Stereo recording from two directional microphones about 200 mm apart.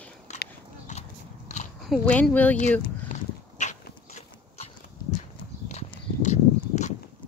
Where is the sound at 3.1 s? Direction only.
35° left (ahead or behind).